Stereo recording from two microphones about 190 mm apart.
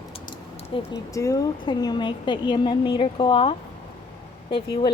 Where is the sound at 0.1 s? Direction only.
30° left (ahead or behind).